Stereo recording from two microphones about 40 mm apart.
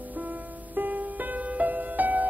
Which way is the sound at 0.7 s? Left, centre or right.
Right.